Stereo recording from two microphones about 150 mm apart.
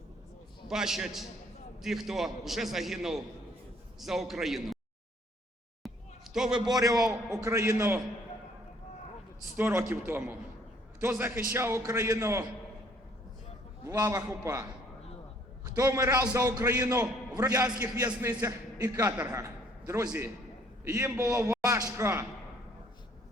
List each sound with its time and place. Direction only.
0.7 s a man's voice: 5° right (ahead or behind)
5.8 s a sound: centre (ahead or behind)
6.3 s a man's voice: 5° right (ahead or behind)
6.6 s a man's voice: 25° right (ahead or behind)
9.6 s a man's voice: 15° right (ahead or behind)
13.8 s a man's voice: 20° right (ahead or behind)